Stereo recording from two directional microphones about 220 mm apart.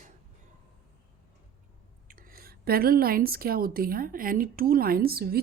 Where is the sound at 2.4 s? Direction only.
45° right (ahead or behind).